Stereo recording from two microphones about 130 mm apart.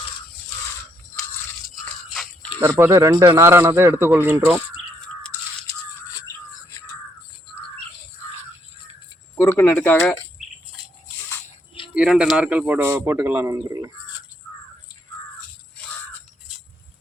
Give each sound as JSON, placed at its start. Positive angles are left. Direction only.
{"t": 1.8, "sound": "toothbrush", "side_deg": 5}
{"t": 2.6, "sound": "speech", "side_deg": -20}
{"t": 9.3, "sound": "speech", "side_deg": 20}
{"t": 11.9, "sound": "a man's voice", "side_deg": -5}